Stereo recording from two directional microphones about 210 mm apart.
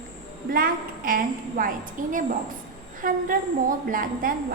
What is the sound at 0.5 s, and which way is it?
A woman's voice, 40° right (ahead or behind).